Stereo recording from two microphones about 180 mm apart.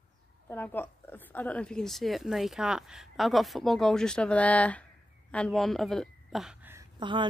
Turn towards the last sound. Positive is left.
turn(degrees=-25)  # may be behind; listen again after turning